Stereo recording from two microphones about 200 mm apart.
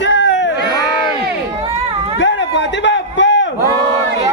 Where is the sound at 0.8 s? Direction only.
55° right (ahead or behind).